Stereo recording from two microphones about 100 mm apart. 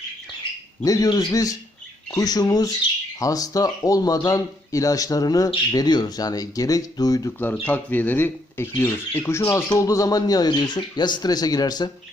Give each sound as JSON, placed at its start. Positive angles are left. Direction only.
{"t": 0.9, "sound": "speech", "side_deg": 40}
{"t": 7.6, "sound": "speech", "side_deg": 15}